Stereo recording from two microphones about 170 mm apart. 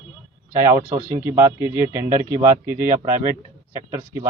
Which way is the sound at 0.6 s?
20° right (ahead or behind).